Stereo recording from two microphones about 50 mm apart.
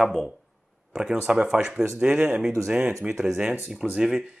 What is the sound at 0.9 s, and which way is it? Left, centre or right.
Speech, centre.